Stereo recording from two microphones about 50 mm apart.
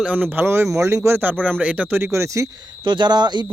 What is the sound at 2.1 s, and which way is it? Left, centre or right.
Speech, right.